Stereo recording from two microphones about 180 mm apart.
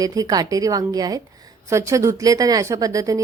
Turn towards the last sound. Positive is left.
turn(degrees=-20)  # may be behind; listen again after turning